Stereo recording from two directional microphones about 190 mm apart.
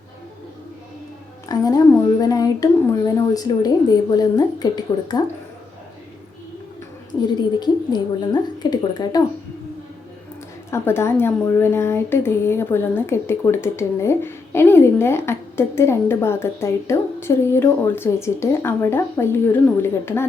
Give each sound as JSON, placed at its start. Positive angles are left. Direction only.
{"t": 1.5, "sound": "a woman's voice", "side_deg": 20}
{"t": 7.6, "sound": "a woman's voice", "side_deg": 20}
{"t": 10.7, "sound": "a woman's voice", "side_deg": 15}